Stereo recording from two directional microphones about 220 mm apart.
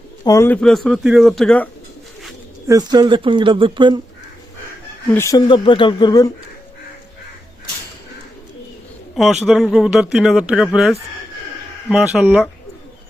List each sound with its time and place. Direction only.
0.3 s speech: 10° left (ahead or behind)
2.6 s speech: 15° right (ahead or behind)
5.1 s speech: 15° left (ahead or behind)
9.1 s speech: centre (ahead or behind)